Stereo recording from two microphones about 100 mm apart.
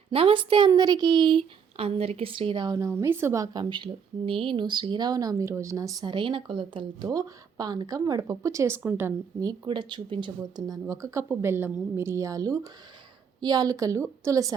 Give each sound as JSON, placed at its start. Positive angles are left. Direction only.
{"t": 0.1, "sound": "a woman's voice", "side_deg": -70}
{"t": 0.7, "sound": "a woman's voice", "side_deg": -45}
{"t": 2.6, "sound": "speech", "side_deg": -30}
{"t": 4.3, "sound": "speech", "side_deg": -60}
{"t": 6.1, "sound": "a woman's voice", "side_deg": -55}
{"t": 7.1, "sound": "speech", "side_deg": -40}
{"t": 9.6, "sound": "speech", "side_deg": -55}